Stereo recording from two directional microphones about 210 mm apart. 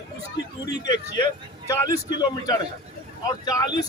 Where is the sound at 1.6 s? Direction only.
15° left (ahead or behind).